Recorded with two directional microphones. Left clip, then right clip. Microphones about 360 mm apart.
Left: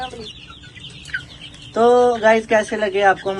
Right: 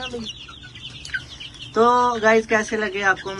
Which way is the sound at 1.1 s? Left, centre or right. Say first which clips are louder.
Left 2 dB; right.